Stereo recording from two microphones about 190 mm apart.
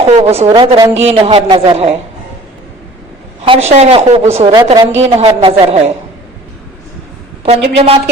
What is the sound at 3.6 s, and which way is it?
A woman's voice, 35° right (ahead or behind).